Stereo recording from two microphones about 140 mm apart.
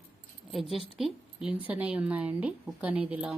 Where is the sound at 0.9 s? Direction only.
5° right (ahead or behind).